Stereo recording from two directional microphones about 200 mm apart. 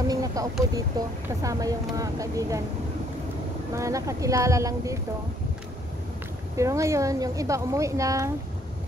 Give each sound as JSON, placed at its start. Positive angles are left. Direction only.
{"t": 0.1, "sound": "vehicle", "side_deg": -15}
{"t": 0.7, "sound": "speech", "side_deg": -15}
{"t": 3.7, "sound": "speech", "side_deg": -15}
{"t": 6.5, "sound": "speech", "side_deg": -15}